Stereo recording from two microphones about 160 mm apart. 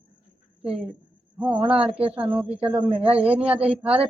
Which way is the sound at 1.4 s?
10° right (ahead or behind).